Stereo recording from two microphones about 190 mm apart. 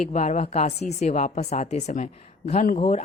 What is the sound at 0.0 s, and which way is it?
A woman's voice, 40° left (ahead or behind).